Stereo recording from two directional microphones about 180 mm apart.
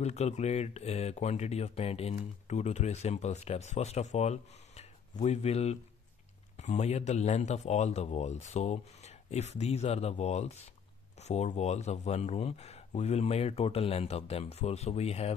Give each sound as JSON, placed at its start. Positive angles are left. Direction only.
{"t": 0.0, "sound": "speech", "side_deg": 40}